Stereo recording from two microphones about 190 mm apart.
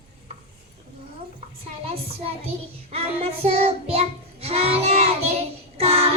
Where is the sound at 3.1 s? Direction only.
30° right (ahead or behind).